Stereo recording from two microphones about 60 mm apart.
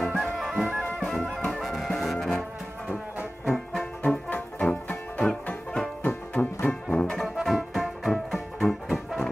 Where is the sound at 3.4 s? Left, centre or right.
Centre.